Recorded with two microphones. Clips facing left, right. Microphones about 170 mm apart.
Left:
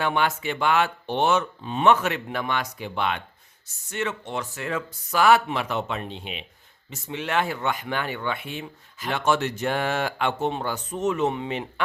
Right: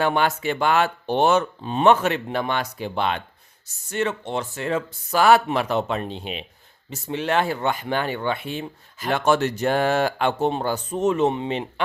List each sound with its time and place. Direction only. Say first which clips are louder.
0.0 s speech: right 3 dB; 40° right (ahead or behind)